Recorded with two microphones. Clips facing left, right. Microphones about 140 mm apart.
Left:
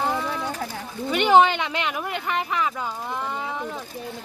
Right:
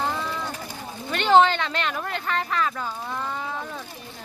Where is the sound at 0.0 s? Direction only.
15° left (ahead or behind).